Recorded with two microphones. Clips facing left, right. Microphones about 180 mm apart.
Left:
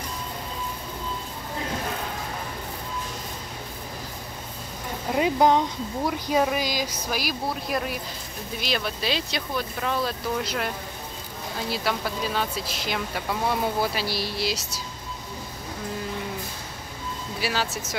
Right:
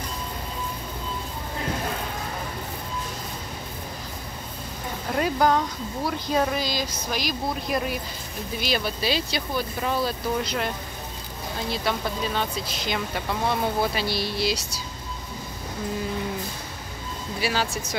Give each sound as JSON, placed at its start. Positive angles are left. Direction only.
{"t": 5.1, "sound": "speech", "side_deg": 20}
{"t": 11.7, "sound": "speech", "side_deg": 5}
{"t": 17.4, "sound": "speech", "side_deg": 0}